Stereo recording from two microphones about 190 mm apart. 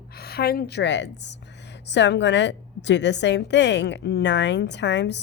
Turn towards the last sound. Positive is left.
turn(degrees=65)  # may be behind; listen again after turning